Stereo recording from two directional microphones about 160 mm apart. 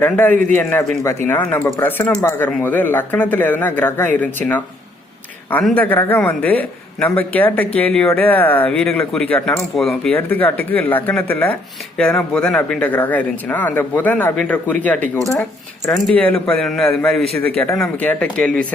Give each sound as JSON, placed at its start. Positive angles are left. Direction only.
{"t": 0.0, "sound": "speech", "side_deg": 10}
{"t": 15.9, "sound": "speech", "side_deg": 5}